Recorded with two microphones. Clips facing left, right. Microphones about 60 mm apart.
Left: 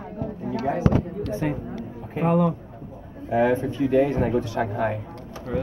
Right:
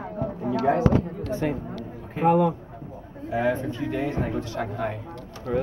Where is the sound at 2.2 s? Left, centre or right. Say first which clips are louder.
Right 1 dB; centre.